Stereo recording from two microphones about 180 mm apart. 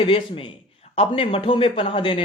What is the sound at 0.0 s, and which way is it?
A man's voice, 30° left (ahead or behind).